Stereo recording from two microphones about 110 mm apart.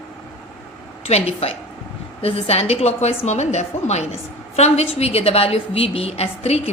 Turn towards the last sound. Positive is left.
turn(degrees=70)  # may be behind; listen again after turning